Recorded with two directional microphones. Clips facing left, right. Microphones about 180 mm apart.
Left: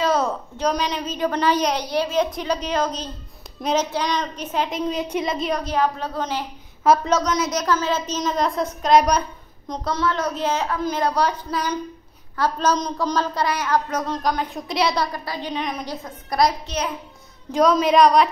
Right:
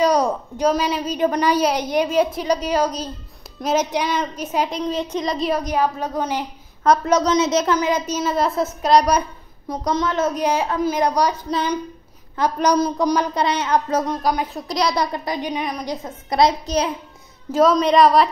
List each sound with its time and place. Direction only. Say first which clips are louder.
0.0 s a woman's voice: right 3 dB; 15° right (ahead or behind); by 5.3 s 10° left (ahead or behind)
5.3 s a woman's voice: right 6 dB; centre (ahead or behind)
5.6 s a woman's voice: right 1 dB; 10° right (ahead or behind)
6.8 s a woman's voice: even; 5° left (ahead or behind)
7.2 s a woman's voice: right 4 dB; 25° right (ahead or behind); by 9.2 s 5° right (ahead or behind)
9.8 s a woman's voice: right 3 dB; 20° right (ahead or behind)
12.4 s a woman's voice: right 3 dB; 15° right (ahead or behind)
14.0 s a woman's voice: right 2 dB; 10° right (ahead or behind)
15.1 s a woman's voice: right 3 dB; 20° right (ahead or behind)
16.6 s a child's voice: right 5 dB; 35° right (ahead or behind)
17.5 s a woman's voice: right 2 dB; centre (ahead or behind)